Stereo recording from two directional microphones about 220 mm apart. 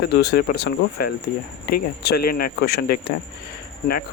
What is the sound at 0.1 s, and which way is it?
Speech, 50° left (ahead or behind).